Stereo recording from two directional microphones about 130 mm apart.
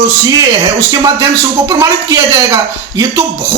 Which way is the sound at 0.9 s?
25° right (ahead or behind).